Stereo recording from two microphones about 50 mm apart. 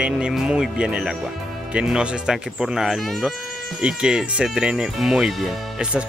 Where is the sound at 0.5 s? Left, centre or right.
Centre.